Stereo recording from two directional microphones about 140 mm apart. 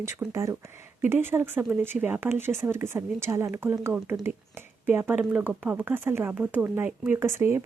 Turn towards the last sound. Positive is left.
turn(degrees=-15)  # may be behind; listen again after turning